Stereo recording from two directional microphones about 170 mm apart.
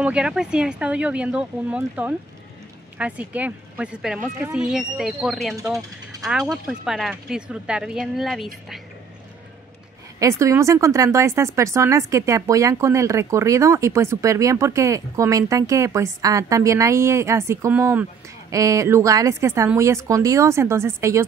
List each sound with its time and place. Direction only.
0.0 s speech: 5° right (ahead or behind)
10.1 s speech: 20° right (ahead or behind)